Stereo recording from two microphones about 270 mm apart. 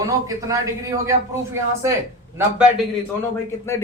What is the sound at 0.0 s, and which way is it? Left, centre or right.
Speech, centre.